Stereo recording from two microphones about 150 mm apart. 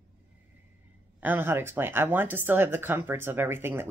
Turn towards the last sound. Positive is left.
turn(degrees=-15)  # may be behind; listen again after turning